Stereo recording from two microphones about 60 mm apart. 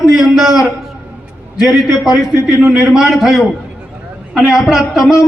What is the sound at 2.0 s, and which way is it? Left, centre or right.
Speech, left.